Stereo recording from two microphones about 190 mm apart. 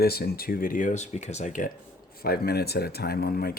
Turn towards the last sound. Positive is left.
turn(degrees=55)  # may be behind; listen again after turning